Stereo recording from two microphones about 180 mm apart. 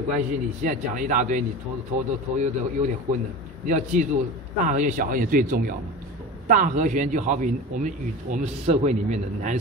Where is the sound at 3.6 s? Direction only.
45° right (ahead or behind).